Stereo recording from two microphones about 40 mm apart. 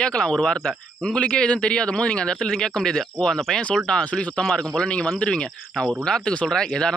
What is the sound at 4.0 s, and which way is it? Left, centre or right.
Speech, left.